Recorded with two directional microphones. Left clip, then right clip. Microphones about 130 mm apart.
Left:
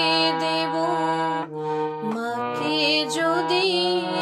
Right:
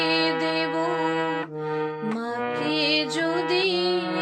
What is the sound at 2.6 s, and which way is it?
Music, 10° right (ahead or behind).